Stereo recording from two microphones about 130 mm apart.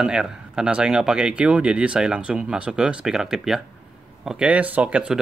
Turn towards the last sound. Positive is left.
turn(degrees=-10)  # may be behind; listen again after turning